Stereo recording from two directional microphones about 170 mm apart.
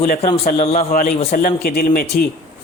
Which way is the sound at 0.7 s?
50° left (ahead or behind).